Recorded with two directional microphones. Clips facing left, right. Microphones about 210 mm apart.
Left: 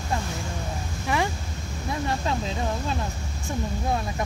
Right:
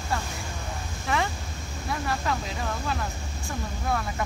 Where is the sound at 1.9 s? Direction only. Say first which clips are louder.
Left 2 dB; 25° left (ahead or behind).